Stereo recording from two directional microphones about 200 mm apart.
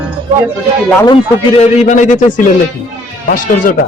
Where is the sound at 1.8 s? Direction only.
35° left (ahead or behind).